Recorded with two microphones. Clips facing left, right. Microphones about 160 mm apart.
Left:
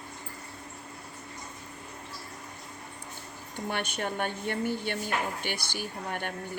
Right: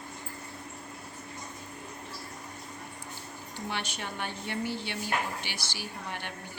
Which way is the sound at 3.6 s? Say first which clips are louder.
Left 4 dB; 55° left (ahead or behind).